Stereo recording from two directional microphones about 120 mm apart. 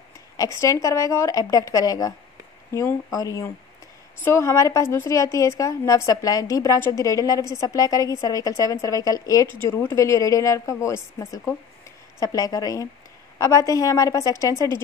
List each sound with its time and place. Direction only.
0.6 s speech: 25° left (ahead or behind)